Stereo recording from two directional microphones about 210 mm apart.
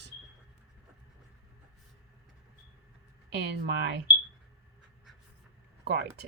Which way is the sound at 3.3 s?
55° right (ahead or behind).